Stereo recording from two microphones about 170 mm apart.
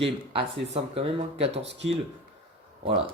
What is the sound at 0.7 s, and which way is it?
Speech, 35° right (ahead or behind).